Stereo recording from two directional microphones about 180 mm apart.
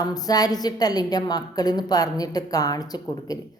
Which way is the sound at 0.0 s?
20° left (ahead or behind).